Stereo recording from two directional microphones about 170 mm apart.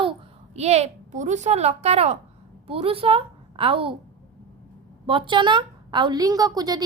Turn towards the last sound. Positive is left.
turn(degrees=-25)  # may be behind; listen again after turning